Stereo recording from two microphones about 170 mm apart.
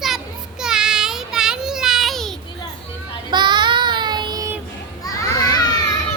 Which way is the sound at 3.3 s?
25° right (ahead or behind).